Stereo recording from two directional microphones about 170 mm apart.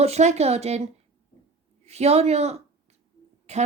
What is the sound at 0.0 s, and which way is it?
Speech, 40° right (ahead or behind).